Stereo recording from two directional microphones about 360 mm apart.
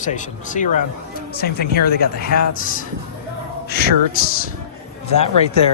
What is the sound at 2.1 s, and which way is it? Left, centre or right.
Speech, left.